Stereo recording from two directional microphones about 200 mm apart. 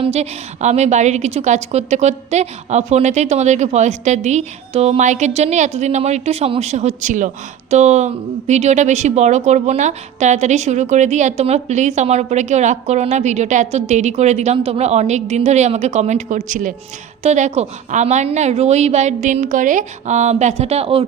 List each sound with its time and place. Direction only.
0.0 s speech: 30° right (ahead or behind)